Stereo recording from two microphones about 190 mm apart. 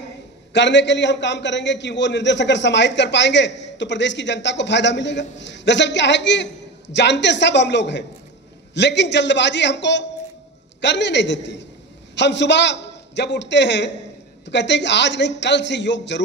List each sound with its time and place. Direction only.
0.5 s a man's voice: 70° left (ahead or behind)